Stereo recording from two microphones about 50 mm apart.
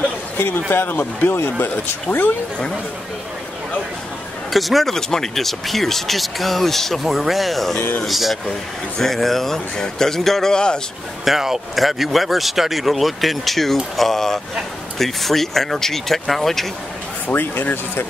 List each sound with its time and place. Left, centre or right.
0.4 s speech: left
1.3 s speech: left
2.0 s speech: left
4.5 s speech: centre
8.5 s speech: centre
10.5 s speech: centre
11.2 s speech: centre
17.3 s speech: left